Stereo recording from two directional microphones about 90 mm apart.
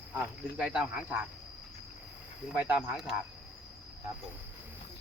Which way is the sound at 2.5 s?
15° right (ahead or behind).